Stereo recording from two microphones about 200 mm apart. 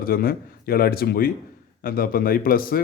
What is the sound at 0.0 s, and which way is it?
A man's voice, 45° left (ahead or behind).